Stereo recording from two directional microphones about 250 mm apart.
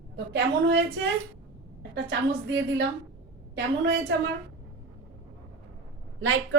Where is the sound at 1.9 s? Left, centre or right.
Right.